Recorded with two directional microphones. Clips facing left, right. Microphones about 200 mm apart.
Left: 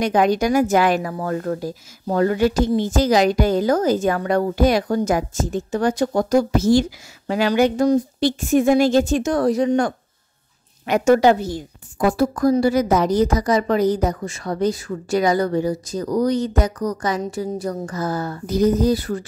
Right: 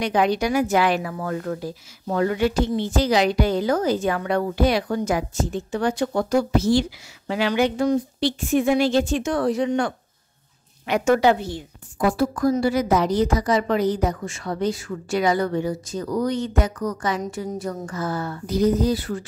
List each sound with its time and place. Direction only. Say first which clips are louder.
0.0 s a woman's voice: left 3 dB; 45° left (ahead or behind)